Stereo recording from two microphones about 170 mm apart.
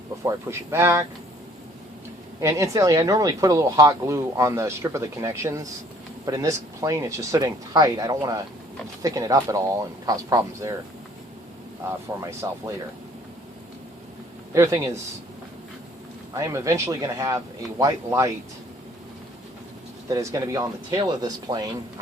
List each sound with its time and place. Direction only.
0.3 s speech: 15° right (ahead or behind)
2.4 s speech: 20° right (ahead or behind)
11.9 s speech: 15° right (ahead or behind)
14.5 s speech: 15° right (ahead or behind)
16.3 s speech: 20° right (ahead or behind)
20.1 s speech: 20° right (ahead or behind)